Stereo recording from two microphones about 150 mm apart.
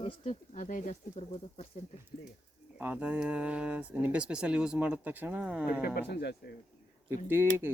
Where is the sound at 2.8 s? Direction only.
10° right (ahead or behind).